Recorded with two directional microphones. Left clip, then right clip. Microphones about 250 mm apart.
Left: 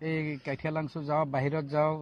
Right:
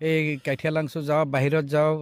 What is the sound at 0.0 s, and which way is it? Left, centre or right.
Speech, right.